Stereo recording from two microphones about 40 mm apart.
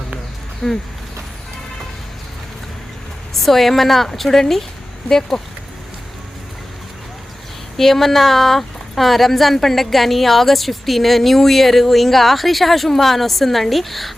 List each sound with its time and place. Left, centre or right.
0.6 s speech: centre
3.3 s speech: centre
7.8 s speech: centre